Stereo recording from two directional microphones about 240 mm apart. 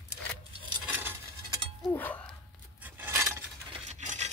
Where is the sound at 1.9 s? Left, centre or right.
Centre.